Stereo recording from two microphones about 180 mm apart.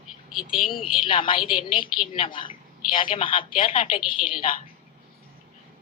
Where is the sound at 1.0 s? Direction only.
25° left (ahead or behind).